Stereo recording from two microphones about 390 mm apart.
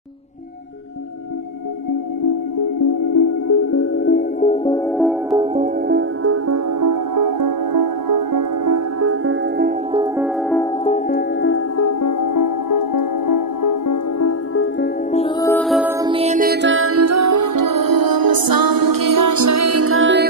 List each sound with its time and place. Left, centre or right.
3.2 s music: left
4.9 s music: centre
5.4 s music: centre
5.9 s music: right
9.9 s music: centre
10.5 s music: centre
11.1 s music: left
14.5 s music: left
15.0 s music: centre; by 20.2 s right